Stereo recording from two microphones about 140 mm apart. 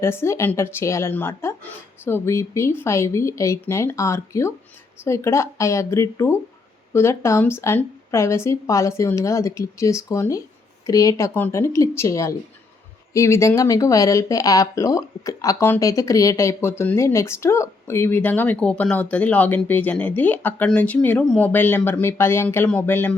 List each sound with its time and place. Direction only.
0.0 s speech: 20° left (ahead or behind)